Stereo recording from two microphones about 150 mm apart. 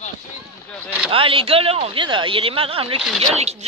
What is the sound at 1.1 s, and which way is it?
Speech, 35° right (ahead or behind).